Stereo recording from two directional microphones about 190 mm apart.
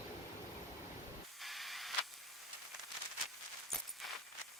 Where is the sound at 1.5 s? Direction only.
Centre (ahead or behind).